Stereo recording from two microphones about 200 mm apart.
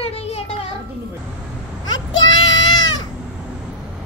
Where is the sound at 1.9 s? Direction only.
75° left (ahead or behind).